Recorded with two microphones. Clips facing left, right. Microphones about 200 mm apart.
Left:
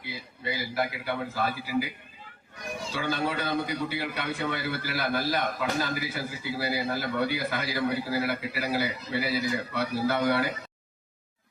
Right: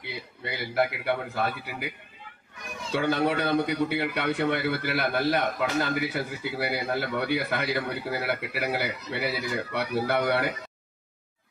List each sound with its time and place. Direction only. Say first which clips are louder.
0.0 s a man's voice: left 1 dB; 65° right (ahead or behind)
2.9 s a man's voice: right 6 dB; 60° right (ahead or behind)